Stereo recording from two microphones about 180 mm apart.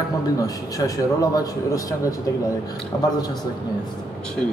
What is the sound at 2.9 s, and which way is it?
Speech, 15° left (ahead or behind).